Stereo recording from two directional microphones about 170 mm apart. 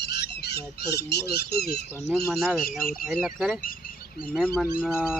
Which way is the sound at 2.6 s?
60° left (ahead or behind).